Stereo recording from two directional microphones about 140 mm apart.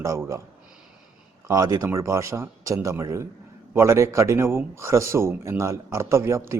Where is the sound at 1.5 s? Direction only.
25° right (ahead or behind).